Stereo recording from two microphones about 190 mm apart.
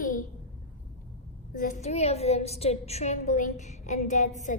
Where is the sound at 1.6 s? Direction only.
40° left (ahead or behind).